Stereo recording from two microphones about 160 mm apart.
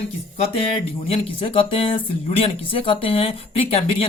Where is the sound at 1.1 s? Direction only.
35° left (ahead or behind).